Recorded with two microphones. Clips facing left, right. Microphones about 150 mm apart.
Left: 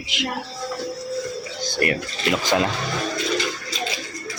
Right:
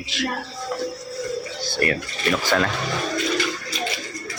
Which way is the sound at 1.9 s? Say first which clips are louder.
Even; 20° left (ahead or behind).